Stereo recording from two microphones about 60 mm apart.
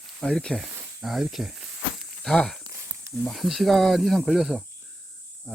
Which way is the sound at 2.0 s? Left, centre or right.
Centre.